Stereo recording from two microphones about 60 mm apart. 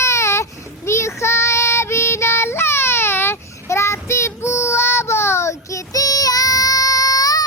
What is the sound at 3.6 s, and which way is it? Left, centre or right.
Child singing, left.